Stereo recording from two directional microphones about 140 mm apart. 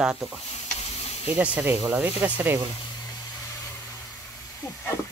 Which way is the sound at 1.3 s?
10° right (ahead or behind).